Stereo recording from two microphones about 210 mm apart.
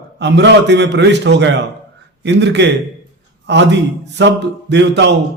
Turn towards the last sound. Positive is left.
turn(degrees=-55)  # may be behind; listen again after turning